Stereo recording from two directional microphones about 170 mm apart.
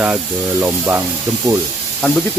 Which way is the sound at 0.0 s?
10° right (ahead or behind).